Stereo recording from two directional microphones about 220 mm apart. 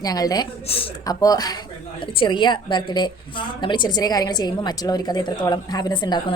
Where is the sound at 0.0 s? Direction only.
15° left (ahead or behind).